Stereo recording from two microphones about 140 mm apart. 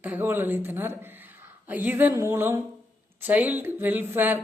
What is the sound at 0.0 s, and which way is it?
Speech, 15° right (ahead or behind).